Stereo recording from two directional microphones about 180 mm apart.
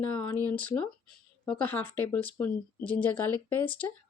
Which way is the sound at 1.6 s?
10° left (ahead or behind).